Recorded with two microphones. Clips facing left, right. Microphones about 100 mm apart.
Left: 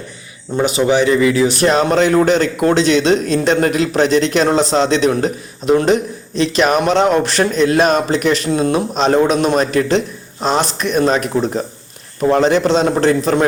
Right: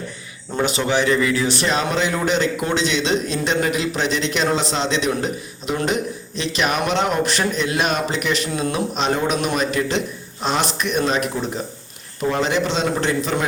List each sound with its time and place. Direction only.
0.5 s speech: 15° left (ahead or behind)
1.6 s speech: 45° left (ahead or behind)